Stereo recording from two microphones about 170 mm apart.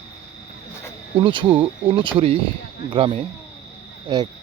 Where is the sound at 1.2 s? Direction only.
30° right (ahead or behind).